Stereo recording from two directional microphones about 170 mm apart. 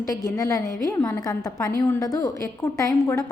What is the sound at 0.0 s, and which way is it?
A woman's voice, 20° left (ahead or behind).